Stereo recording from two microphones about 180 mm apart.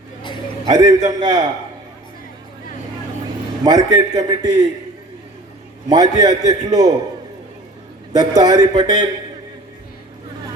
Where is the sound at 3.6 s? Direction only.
20° right (ahead or behind).